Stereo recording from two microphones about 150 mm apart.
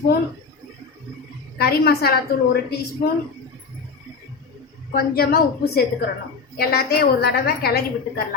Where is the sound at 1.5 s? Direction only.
90° left.